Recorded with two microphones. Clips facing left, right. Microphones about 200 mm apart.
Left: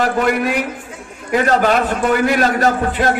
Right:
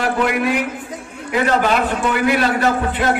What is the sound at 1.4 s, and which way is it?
A man's voice, 40° left (ahead or behind).